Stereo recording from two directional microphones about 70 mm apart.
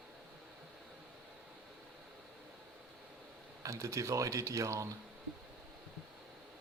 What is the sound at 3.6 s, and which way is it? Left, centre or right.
Speech, right.